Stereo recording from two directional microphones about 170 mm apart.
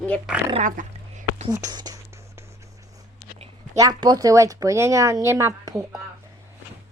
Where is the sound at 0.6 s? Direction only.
50° right (ahead or behind).